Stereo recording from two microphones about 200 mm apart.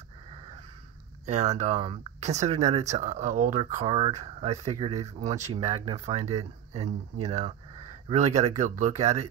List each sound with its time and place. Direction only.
1.2 s speech: 35° right (ahead or behind)